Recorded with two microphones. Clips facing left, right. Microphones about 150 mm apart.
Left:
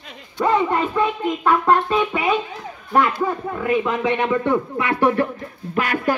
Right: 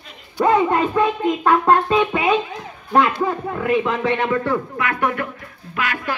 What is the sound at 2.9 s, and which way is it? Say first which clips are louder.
Speech: right 1 dB; 10° right (ahead or behind).